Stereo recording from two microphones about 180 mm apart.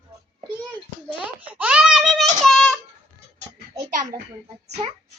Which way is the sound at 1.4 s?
5° right (ahead or behind).